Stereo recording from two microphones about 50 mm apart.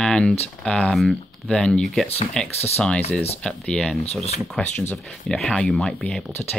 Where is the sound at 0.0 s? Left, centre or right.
Centre.